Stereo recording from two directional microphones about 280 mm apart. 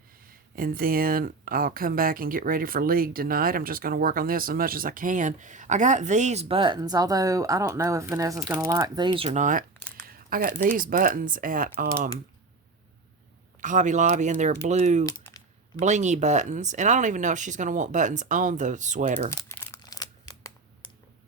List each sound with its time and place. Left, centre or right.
0.5 s speech: right
13.6 s speech: right
19.3 s crumpling: centre